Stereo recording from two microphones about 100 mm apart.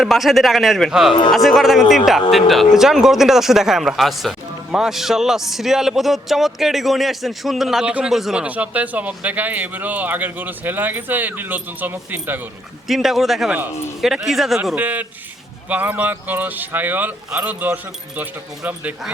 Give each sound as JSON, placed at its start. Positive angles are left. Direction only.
{"t": 0.0, "sound": "speech", "side_deg": 0}
{"t": 8.4, "sound": "speech", "side_deg": -15}
{"t": 12.9, "sound": "speech", "side_deg": 0}
{"t": 14.8, "sound": "speech", "side_deg": -15}